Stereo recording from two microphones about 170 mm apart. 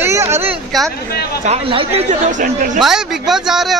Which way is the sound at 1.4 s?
35° right (ahead or behind).